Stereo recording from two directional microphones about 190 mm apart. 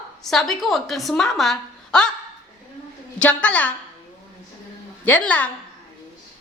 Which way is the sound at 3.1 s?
5° left (ahead or behind).